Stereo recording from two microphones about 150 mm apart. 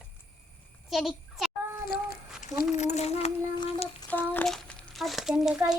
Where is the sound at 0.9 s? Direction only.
Centre (ahead or behind).